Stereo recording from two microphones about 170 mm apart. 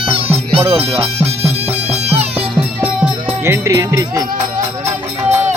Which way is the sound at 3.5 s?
20° right (ahead or behind).